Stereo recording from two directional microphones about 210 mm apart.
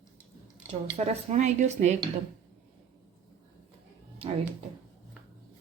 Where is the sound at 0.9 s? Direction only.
30° right (ahead or behind).